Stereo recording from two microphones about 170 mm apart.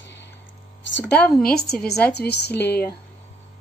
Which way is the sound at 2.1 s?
75° left (ahead or behind).